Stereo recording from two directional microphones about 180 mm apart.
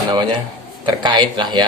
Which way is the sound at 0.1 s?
25° right (ahead or behind).